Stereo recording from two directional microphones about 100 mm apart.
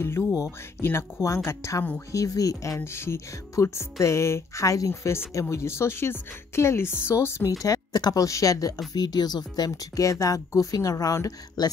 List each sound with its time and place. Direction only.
0.0 s speech: 25° left (ahead or behind)
7.6 s speech: 40° left (ahead or behind)